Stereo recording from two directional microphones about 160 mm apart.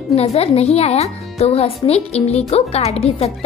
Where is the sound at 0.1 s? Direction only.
40° left (ahead or behind).